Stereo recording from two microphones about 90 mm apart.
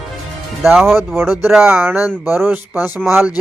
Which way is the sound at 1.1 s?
25° right (ahead or behind).